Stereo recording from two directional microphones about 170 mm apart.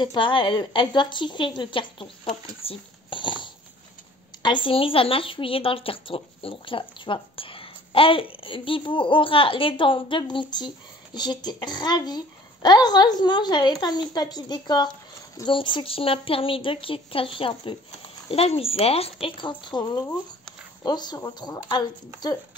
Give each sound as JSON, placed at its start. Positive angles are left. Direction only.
{"t": 0.0, "sound": "a woman's voice", "side_deg": 25}